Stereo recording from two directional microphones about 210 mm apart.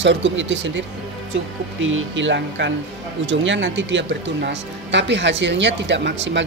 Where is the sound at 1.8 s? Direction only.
65° right (ahead or behind).